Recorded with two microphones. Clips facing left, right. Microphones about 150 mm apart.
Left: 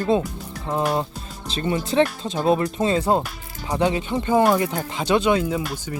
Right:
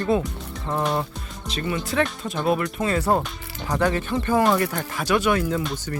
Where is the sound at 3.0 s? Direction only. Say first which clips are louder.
Left 1 dB; 15° left (ahead or behind).